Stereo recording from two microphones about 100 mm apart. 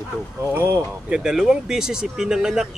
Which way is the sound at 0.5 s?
20° right (ahead or behind).